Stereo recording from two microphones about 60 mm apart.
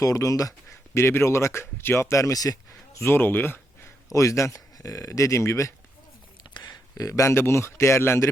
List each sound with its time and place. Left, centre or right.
0.0 s speech: left
0.9 s speech: left
3.0 s speech: left
4.1 s speech: left
6.9 s speech: left
7.3 s speech: left